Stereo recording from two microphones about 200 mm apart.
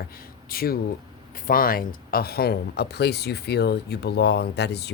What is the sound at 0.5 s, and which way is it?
Speech, 50° left (ahead or behind).